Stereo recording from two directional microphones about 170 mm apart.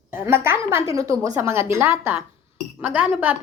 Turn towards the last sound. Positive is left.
turn(degrees=-5)  # may be behind; listen again after turning